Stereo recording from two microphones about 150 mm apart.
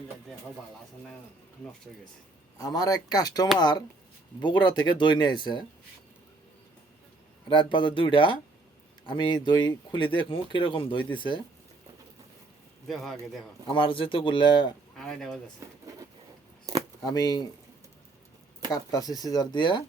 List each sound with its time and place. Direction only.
2.6 s speech: 25° left (ahead or behind)
7.4 s speech: 30° left (ahead or behind)
12.9 s a man's voice: centre (ahead or behind)
13.7 s speech: 35° left (ahead or behind)
14.9 s a man's voice: 5° left (ahead or behind)
15.6 s a sound: 20° right (ahead or behind)
16.7 s keys jangling: 20° right (ahead or behind)
17.0 s speech: 25° left (ahead or behind)
18.7 s speech: 25° left (ahead or behind)